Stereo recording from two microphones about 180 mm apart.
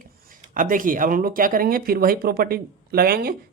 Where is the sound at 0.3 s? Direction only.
50° right (ahead or behind).